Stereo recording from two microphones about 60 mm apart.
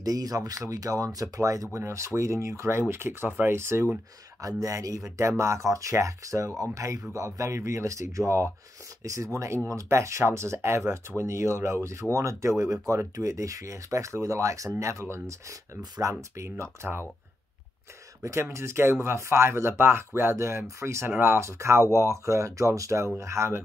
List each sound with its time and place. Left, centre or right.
0.0 s speech: right
4.4 s speech: right
12.8 s speech: right
16.8 s speech: right
18.2 s speech: right
20.3 s speech: right